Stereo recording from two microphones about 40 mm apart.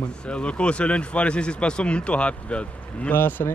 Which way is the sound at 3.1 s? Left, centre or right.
Left.